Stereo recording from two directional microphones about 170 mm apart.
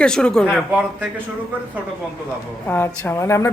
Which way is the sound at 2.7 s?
15° left (ahead or behind).